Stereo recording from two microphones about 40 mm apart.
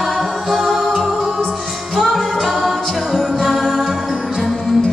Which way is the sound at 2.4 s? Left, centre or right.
Centre.